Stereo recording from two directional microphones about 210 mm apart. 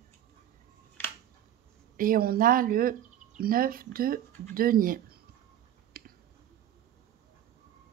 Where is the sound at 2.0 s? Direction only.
45° right (ahead or behind).